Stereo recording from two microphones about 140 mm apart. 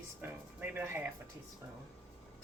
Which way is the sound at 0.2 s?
15° right (ahead or behind).